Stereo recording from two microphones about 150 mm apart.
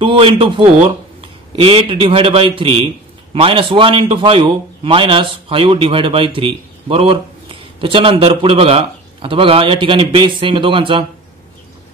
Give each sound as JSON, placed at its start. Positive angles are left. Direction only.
{"t": 0.0, "sound": "a man's voice", "side_deg": -35}